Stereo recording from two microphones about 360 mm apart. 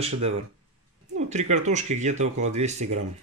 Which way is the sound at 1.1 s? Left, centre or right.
Centre.